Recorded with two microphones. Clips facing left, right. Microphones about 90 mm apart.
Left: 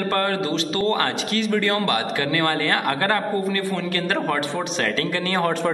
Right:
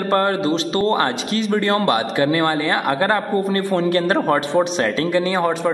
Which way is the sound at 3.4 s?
35° right (ahead or behind).